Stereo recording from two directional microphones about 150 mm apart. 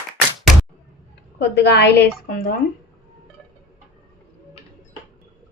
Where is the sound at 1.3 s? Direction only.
90° left.